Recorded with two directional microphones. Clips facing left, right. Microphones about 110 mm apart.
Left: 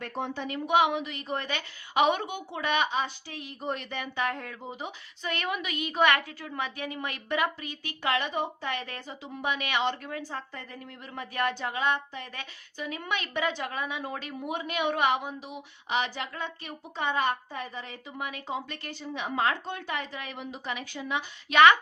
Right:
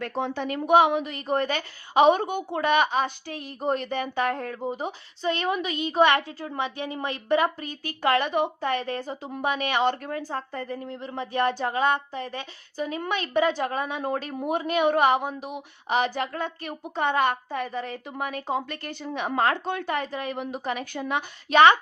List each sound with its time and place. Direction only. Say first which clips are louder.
0.0 s a woman's voice: right 5 dB; 90° right
0.4 s a woman's voice: right 5 dB; 45° right (ahead or behind)
8.6 s a woman's voice: right 8 dB; 35° right (ahead or behind)
21.5 s a woman's voice: right 3 dB; 30° right (ahead or behind)